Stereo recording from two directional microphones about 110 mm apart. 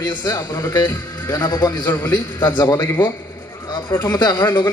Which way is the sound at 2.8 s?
20° left (ahead or behind).